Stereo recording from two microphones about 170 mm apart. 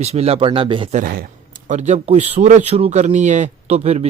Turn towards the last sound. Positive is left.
turn(degrees=-40)  # may be behind; listen again after turning